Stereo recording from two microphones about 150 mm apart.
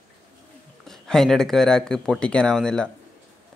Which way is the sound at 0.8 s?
Centre (ahead or behind).